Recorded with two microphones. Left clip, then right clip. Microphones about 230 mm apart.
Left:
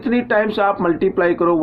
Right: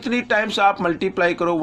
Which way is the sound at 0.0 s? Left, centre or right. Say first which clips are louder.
Left 3 dB; right.